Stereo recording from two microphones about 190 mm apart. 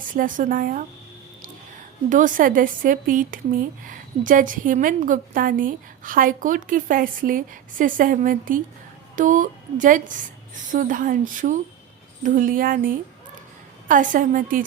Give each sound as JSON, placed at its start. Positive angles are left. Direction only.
{"t": 0.1, "sound": "speech", "side_deg": -45}
{"t": 2.0, "sound": "speech", "side_deg": -45}